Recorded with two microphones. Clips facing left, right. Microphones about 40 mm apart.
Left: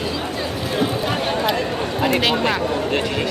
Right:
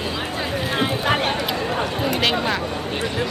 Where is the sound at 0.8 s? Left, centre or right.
Right.